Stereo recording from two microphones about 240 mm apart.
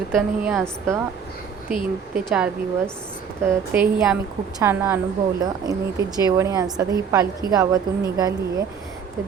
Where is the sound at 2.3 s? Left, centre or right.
Centre.